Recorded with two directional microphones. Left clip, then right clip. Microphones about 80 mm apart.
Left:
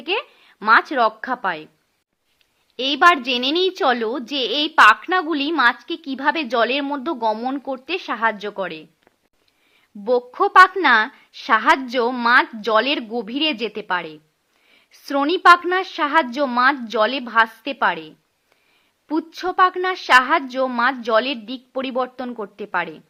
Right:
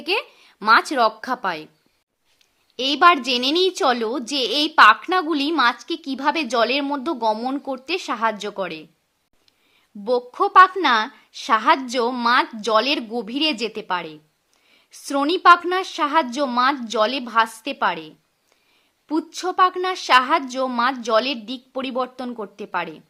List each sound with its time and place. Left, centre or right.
0.0 s speech: right
2.7 s a woman's voice: right
10.0 s a woman's voice: right